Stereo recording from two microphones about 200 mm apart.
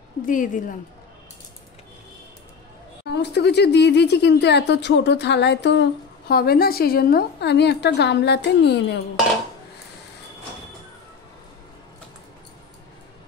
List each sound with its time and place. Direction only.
0.3 s a woman's voice: 40° left (ahead or behind)
3.1 s speech: 55° left (ahead or behind)